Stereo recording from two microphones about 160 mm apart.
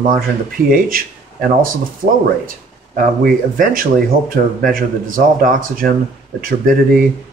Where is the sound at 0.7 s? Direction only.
60° right (ahead or behind).